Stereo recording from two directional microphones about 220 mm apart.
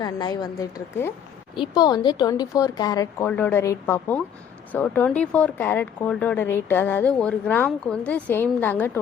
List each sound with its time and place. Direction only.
0.0 s speech: 20° left (ahead or behind)